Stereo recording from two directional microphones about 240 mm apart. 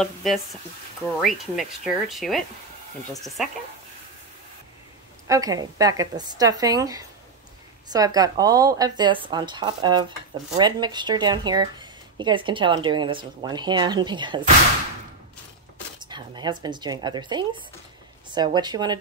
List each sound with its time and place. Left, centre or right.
0.0 s speech: centre
5.3 s speech: centre
16.0 s speech: centre